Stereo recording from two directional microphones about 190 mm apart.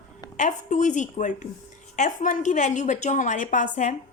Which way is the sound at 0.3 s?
40° left (ahead or behind).